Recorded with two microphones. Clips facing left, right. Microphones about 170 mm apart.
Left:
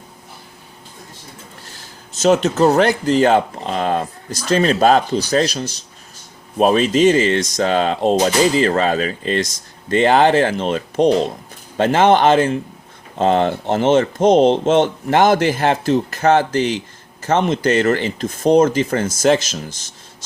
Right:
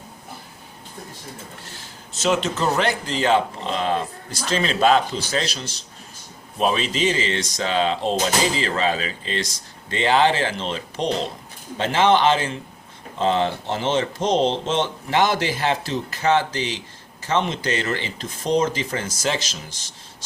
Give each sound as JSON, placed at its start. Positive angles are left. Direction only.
{"t": 2.2, "sound": "speech", "side_deg": 40}